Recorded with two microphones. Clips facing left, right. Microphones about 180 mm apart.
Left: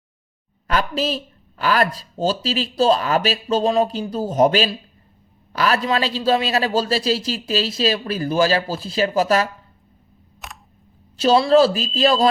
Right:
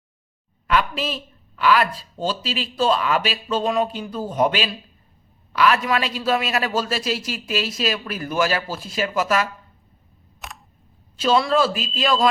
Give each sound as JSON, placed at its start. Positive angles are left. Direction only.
{"t": 0.7, "sound": "speech", "side_deg": 40}
{"t": 10.4, "sound": "camera", "side_deg": 0}
{"t": 11.2, "sound": "speech", "side_deg": 35}